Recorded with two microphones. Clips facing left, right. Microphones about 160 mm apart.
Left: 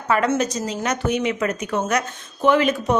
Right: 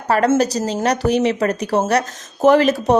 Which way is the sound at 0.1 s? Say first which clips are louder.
Right 4 dB; 40° right (ahead or behind).